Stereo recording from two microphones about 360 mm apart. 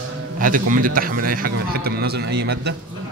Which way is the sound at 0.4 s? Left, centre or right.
Right.